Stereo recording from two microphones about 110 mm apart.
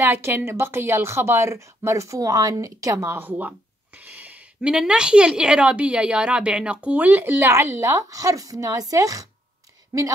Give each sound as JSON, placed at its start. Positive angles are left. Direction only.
{"t": 0.0, "sound": "a woman's voice", "side_deg": -20}